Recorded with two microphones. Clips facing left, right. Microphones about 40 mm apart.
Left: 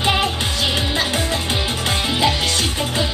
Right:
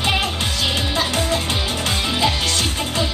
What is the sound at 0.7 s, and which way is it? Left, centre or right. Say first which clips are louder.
Music: left 1 dB; left.